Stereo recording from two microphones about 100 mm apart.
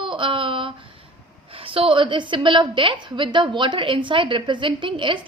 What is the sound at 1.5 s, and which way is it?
A woman's voice, 65° right (ahead or behind).